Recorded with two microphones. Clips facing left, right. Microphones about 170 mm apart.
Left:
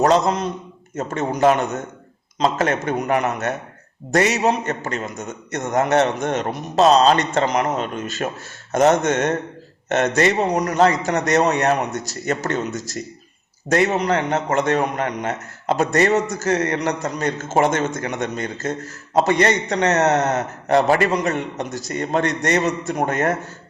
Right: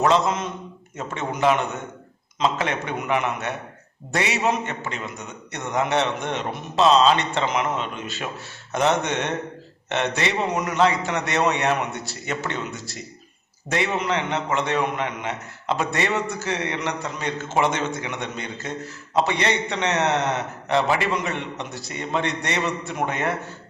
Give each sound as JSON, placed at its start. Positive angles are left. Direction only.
{"t": 0.0, "sound": "a man's voice", "side_deg": 40}